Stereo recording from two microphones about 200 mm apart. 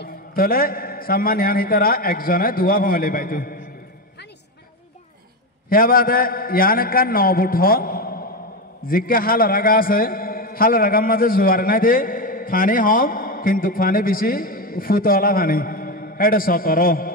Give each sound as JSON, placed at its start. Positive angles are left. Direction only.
{"t": 0.0, "sound": "a man's voice", "side_deg": 45}
{"t": 5.7, "sound": "a man's voice", "side_deg": 45}